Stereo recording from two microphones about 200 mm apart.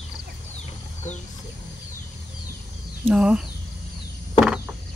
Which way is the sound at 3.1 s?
5° right (ahead or behind).